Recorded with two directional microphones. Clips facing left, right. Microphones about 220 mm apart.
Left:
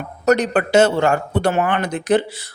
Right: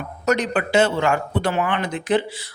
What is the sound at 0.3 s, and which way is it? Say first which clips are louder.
A man's voice: left 5 dB; 45° left (ahead or behind).